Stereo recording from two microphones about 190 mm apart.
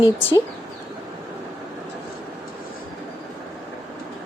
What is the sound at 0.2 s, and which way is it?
Speech, 10° left (ahead or behind).